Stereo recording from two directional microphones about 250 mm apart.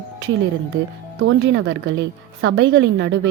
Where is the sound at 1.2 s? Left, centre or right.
Right.